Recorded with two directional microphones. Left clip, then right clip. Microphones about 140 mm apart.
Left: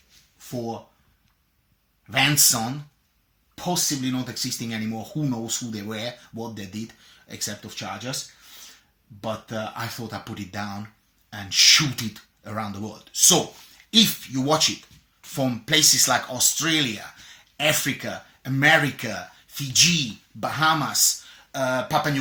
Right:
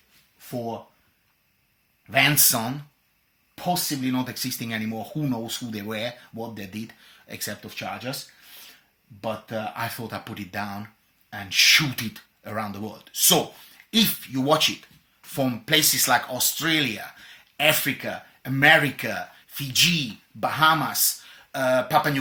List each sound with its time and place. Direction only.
2.0 s speech: 30° right (ahead or behind)
3.5 s speech: 15° right (ahead or behind)
4.3 s speech: 25° right (ahead or behind)
6.3 s speech: 15° right (ahead or behind)
9.2 s speech: 15° right (ahead or behind)